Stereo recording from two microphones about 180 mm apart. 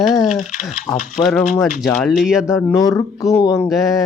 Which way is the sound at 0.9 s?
25° left (ahead or behind).